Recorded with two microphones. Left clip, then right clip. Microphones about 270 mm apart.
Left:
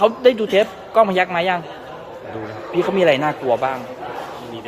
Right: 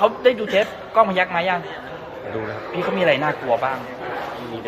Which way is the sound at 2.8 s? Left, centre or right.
Left.